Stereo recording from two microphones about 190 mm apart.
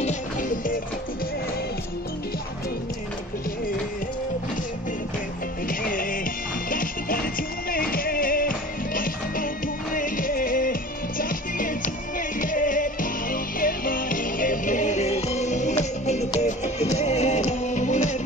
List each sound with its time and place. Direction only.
0.0 s music: 40° left (ahead or behind)
5.7 s music: 45° left (ahead or behind)